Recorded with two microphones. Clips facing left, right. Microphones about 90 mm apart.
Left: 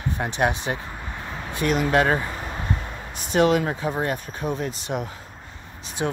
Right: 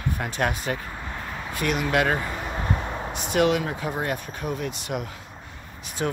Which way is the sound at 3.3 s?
35° left (ahead or behind).